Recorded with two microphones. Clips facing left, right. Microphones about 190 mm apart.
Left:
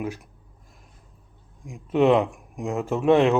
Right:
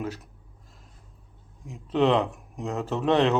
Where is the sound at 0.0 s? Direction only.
15° left (ahead or behind).